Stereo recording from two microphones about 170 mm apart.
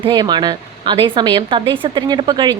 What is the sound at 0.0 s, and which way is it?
A woman's voice, 25° right (ahead or behind).